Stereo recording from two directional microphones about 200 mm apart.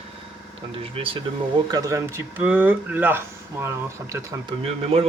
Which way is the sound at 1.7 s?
15° right (ahead or behind).